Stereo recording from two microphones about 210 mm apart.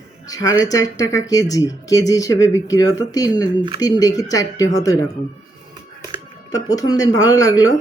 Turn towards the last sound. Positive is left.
turn(degrees=15)  # may be behind; listen again after turning